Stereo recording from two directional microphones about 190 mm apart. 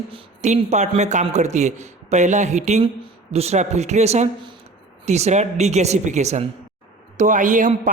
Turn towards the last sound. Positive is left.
turn(degrees=-40)  # may be behind; listen again after turning